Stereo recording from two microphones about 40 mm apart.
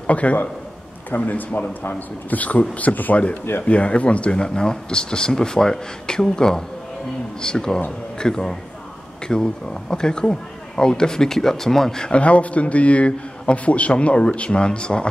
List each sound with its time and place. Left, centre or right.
0.0 s a man's voice: left
1.1 s a man's voice: left
3.6 s speech: left; by 12.1 s centre
12.1 s a man's voice: left